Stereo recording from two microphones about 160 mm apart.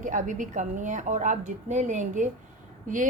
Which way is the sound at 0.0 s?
55° right (ahead or behind).